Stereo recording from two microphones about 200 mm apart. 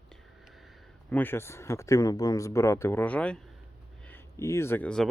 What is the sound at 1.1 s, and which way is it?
Speech, 10° left (ahead or behind).